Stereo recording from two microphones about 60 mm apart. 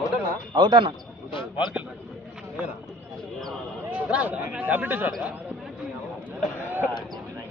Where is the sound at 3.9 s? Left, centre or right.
Right.